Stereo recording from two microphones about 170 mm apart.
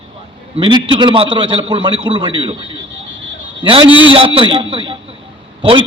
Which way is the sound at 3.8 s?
30° left (ahead or behind).